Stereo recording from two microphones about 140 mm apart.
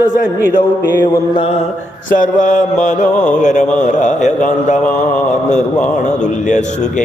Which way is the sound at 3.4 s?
60° left (ahead or behind).